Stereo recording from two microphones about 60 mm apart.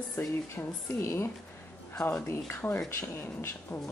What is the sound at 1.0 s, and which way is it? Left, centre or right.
Speech, left.